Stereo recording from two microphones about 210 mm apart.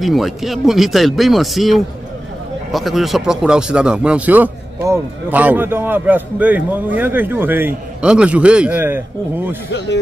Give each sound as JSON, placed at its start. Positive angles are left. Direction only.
{"t": 0.0, "sound": "a man's voice", "side_deg": 0}
{"t": 9.7, "sound": "speech", "side_deg": 55}